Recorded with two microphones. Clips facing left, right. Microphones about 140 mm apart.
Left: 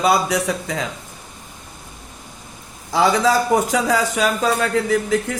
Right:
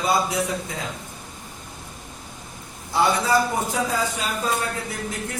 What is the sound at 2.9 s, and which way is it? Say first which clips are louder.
A man's voice: left 4 dB; 90° left.